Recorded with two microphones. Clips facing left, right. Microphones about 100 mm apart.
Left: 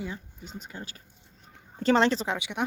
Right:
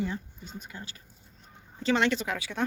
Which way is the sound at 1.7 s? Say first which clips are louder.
Left 3 dB; 40° left (ahead or behind).